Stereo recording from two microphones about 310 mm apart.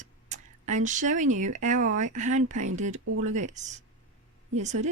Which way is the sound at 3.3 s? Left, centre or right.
Right.